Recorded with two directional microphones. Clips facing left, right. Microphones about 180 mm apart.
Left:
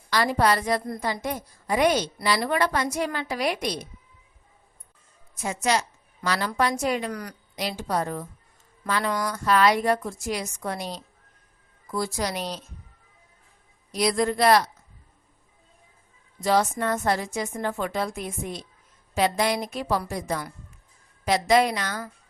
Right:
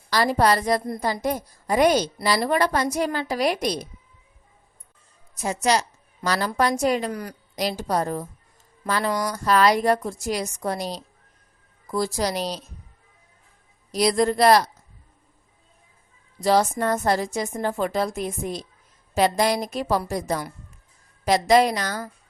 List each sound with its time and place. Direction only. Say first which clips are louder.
0.1 s a woman's voice: right 2 dB; 35° right (ahead or behind)
5.3 s a woman's voice: right 3 dB; 35° right (ahead or behind)
7.1 s a woman's voice: right 2 dB; 25° right (ahead or behind)
7.5 s a woman's voice: right 3 dB; 40° right (ahead or behind)
13.9 s a woman's voice: right 3 dB; 35° right (ahead or behind)
16.4 s a woman's voice: right 3 dB; 35° right (ahead or behind)